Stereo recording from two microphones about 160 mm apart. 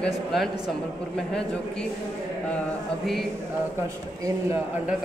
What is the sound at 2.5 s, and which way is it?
Speech, centre (ahead or behind).